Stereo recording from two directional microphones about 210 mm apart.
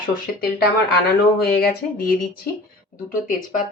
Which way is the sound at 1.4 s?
50° left (ahead or behind).